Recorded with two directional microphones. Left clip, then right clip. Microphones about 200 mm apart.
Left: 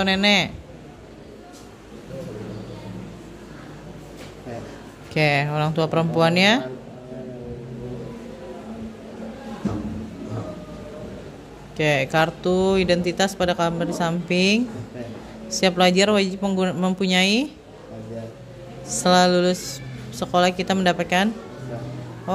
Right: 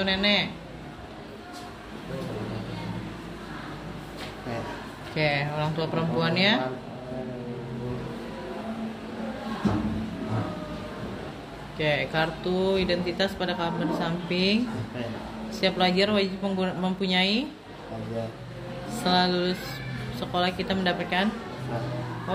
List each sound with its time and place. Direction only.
0.0 s speech: 55° left (ahead or behind)
5.1 s speech: 55° left (ahead or behind)
11.8 s speech: 50° left (ahead or behind)
19.0 s speech: 50° left (ahead or behind)